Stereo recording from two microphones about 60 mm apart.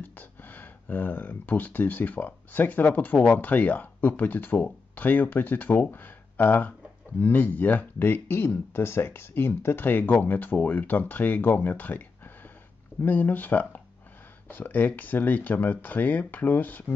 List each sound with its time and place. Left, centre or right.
0.0 s speech: left